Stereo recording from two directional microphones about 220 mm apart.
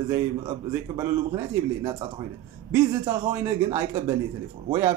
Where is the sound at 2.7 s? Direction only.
10° right (ahead or behind).